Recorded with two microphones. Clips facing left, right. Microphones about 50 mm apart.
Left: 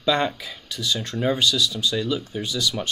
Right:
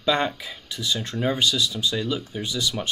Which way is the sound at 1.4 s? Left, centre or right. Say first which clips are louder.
Left 1 dB; right.